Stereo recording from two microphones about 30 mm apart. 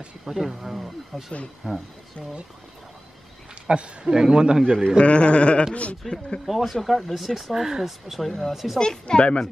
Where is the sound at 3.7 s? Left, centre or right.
Right.